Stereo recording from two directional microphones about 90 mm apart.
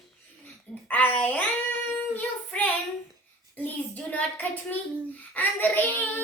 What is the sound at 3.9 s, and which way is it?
Child singing, 15° left (ahead or behind).